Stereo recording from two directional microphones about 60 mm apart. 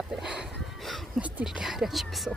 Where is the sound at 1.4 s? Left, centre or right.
Centre.